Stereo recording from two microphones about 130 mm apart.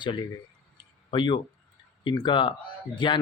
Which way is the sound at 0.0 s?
35° left (ahead or behind).